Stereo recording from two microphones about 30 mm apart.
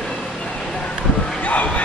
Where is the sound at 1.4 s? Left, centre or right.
Left.